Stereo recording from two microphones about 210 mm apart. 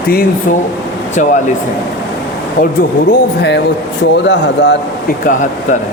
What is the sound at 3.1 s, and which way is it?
Speech, 55° left (ahead or behind).